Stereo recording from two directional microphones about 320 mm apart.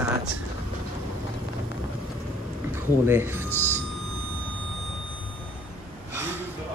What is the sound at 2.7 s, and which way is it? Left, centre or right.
Speech, centre.